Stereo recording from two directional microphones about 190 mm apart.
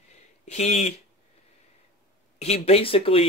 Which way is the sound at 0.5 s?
35° left (ahead or behind).